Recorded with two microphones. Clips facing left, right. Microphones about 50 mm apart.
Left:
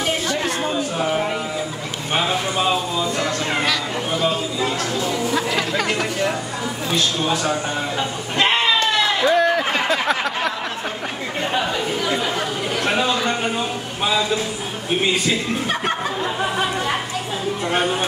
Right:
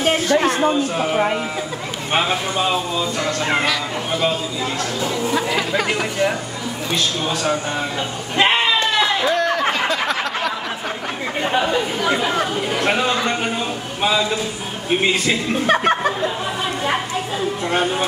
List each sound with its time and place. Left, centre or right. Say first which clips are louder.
0.0 s a sound: right 5 dB; right
0.6 s speech: right 4 dB; centre
2.6 s speech: left 1 dB; centre
5.3 s speech: right 1 dB; centre
8.4 s sheep: right 1 dB; centre
9.3 s a sound: left 1 dB; centre
11.5 s speech: right 3 dB; centre
15.6 s speech: right 6 dB; right